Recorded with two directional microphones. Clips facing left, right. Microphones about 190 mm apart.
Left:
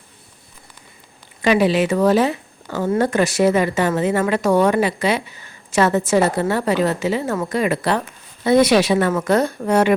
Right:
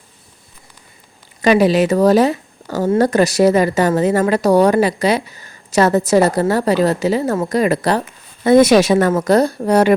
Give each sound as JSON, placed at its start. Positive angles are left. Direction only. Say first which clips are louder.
{"t": 1.4, "sound": "a woman's voice", "louder": "right 4 dB", "side_deg": -40}